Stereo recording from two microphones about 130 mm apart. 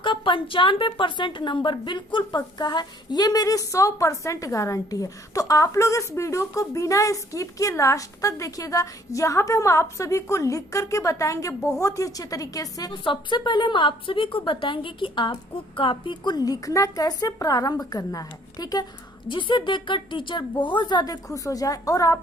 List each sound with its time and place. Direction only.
0.0 s a woman's voice: 40° left (ahead or behind)